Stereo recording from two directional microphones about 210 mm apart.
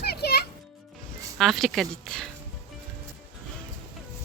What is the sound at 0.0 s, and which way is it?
Music, 50° left (ahead or behind).